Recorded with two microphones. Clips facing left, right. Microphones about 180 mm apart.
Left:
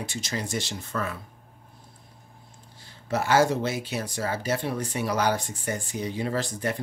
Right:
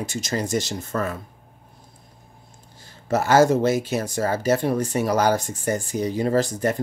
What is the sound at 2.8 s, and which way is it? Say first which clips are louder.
Speech: right 5 dB; 45° right (ahead or behind).